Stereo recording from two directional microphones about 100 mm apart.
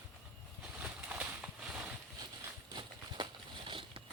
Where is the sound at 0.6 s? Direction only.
15° right (ahead or behind).